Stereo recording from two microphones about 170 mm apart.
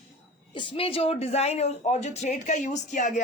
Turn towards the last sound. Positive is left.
turn(degrees=50)  # may be behind; listen again after turning